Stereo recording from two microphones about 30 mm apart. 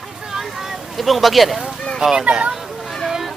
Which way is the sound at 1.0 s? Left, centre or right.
Centre.